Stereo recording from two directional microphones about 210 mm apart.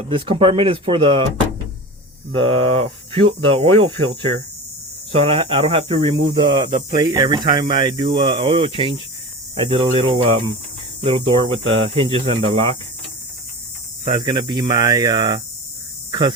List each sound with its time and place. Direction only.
0.1 s speech: 25° right (ahead or behind)
2.3 s speech: 25° right (ahead or behind)
5.1 s speech: 25° right (ahead or behind)
14.0 s speech: 20° right (ahead or behind)